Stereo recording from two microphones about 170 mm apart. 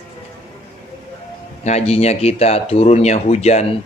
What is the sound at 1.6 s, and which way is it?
Speech, 40° left (ahead or behind).